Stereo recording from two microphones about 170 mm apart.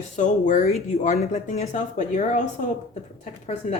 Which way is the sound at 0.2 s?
45° left (ahead or behind).